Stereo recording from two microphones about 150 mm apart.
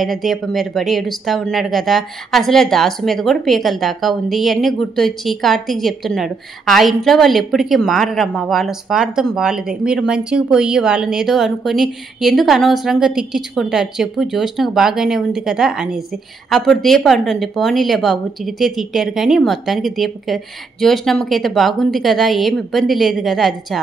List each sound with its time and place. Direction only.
0.0 s speech: centre (ahead or behind)